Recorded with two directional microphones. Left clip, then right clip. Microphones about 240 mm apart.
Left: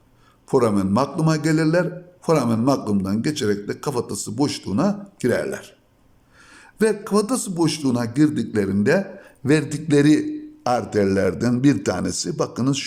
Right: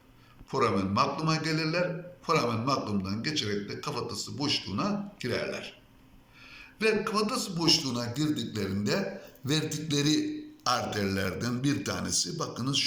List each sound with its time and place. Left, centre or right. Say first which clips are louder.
0.4 s a man's voice: left 8 dB; left